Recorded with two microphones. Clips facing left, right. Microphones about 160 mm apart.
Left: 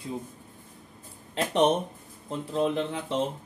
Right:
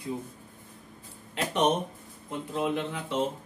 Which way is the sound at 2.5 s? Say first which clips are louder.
Left 3 dB; 30° left (ahead or behind).